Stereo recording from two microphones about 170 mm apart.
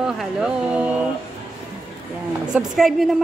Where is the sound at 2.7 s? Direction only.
Centre (ahead or behind).